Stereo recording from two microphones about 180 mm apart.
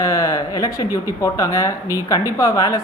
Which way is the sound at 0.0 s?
20° left (ahead or behind).